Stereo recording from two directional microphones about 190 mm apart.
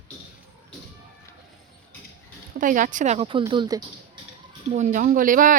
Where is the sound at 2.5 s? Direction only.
45° right (ahead or behind); by 3.8 s 20° right (ahead or behind).